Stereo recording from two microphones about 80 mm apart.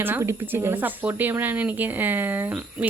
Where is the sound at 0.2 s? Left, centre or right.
Right.